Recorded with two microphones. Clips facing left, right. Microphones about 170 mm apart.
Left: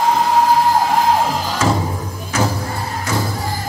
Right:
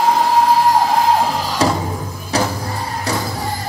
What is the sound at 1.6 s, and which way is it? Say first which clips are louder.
Music: right 1 dB; 35° right (ahead or behind).